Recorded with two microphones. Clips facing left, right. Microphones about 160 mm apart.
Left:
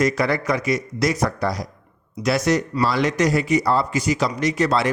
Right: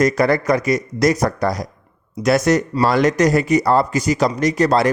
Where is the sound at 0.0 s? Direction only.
45° right (ahead or behind).